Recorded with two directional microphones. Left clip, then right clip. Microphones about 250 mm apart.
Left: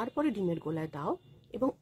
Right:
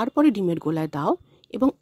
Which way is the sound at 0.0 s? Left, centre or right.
Right.